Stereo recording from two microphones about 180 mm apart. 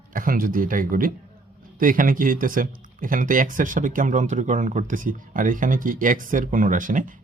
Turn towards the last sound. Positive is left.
turn(degrees=-45)  # may be behind; listen again after turning